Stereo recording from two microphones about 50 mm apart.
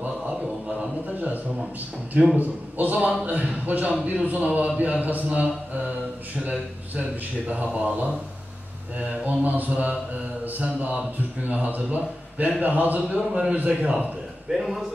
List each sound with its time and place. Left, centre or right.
0.3 s a sound: right
2.3 s a man's voice: right
7.4 s a man's voice: right
13.3 s speech: centre
14.5 s a man's voice: centre